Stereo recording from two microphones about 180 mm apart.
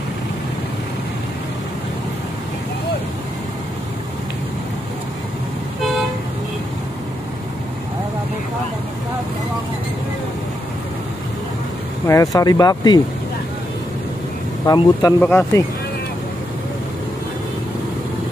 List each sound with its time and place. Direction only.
12.1 s speech: 20° left (ahead or behind)
14.7 s speech: 20° left (ahead or behind)